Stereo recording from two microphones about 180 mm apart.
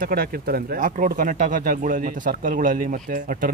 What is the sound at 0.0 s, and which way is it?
Speech, 55° right (ahead or behind).